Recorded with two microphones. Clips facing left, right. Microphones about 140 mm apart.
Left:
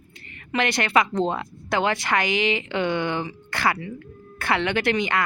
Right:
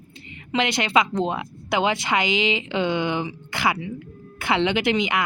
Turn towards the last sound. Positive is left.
turn(degrees=-15)  # may be behind; listen again after turning